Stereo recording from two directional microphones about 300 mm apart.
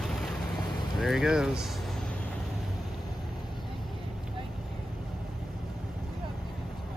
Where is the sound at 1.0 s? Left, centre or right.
Centre.